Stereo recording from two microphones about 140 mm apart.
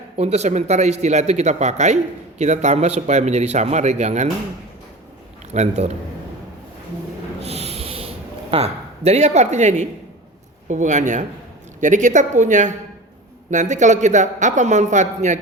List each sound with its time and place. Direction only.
0.2 s a man's voice: 50° right (ahead or behind)
5.5 s a man's voice: 55° right (ahead or behind)
7.4 s snort: 45° right (ahead or behind)
10.7 s a man's voice: 60° right (ahead or behind)